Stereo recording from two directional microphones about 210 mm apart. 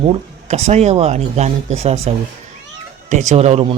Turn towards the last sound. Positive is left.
turn(degrees=-30)  # may be behind; listen again after turning